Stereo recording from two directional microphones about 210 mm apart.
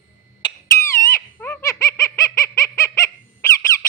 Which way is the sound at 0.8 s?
10° left (ahead or behind).